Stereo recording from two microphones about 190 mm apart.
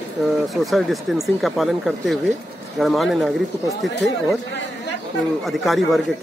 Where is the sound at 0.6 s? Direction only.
Centre (ahead or behind).